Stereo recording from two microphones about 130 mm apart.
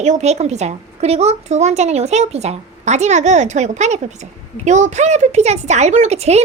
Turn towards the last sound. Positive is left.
turn(degrees=-55)  # may be behind; listen again after turning